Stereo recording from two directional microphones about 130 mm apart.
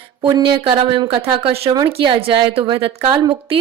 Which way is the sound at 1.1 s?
45° right (ahead or behind).